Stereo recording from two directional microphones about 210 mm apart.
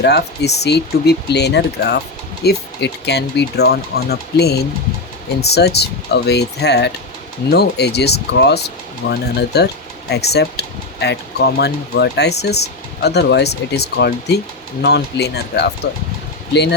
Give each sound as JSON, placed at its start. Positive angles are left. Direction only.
{"t": 0.0, "sound": "speech", "side_deg": 50}